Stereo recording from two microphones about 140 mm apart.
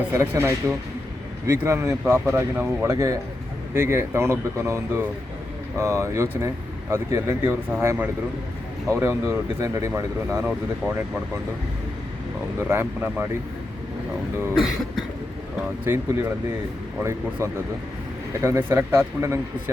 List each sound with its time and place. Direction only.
0.1 s speech: 20° right (ahead or behind)
12.6 s speech: 15° right (ahead or behind)
14.5 s cough: centre (ahead or behind)
17.0 s speech: 20° right (ahead or behind)